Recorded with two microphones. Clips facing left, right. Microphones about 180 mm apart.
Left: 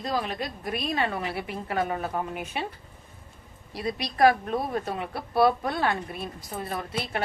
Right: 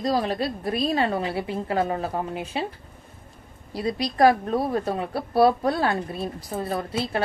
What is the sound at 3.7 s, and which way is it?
A woman's voice, 30° right (ahead or behind).